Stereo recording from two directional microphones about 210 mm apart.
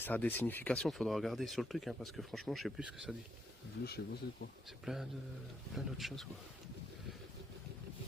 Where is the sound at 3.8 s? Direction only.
50° left (ahead or behind).